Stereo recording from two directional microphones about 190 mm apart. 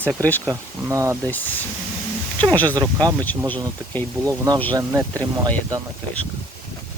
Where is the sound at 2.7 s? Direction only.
20° right (ahead or behind).